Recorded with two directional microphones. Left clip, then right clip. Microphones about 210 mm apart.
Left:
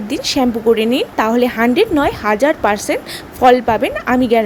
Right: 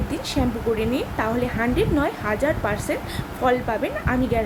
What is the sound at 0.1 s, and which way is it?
A woman's voice, 45° left (ahead or behind).